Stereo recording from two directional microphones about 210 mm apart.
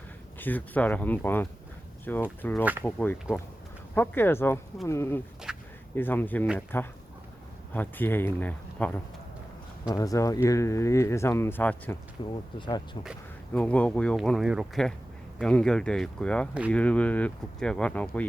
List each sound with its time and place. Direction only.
0.3 s speech: 10° left (ahead or behind)
5.5 s a sound: 5° right (ahead or behind)
6.0 s speech: 10° left (ahead or behind)
9.9 s speech: 15° left (ahead or behind)
12.3 s speech: 20° left (ahead or behind)
13.5 s speech: 5° left (ahead or behind)